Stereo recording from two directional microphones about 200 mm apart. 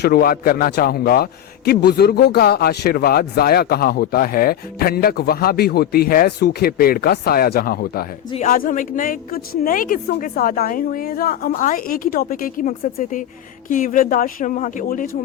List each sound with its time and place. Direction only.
0.0 s a man's voice: 50° left (ahead or behind)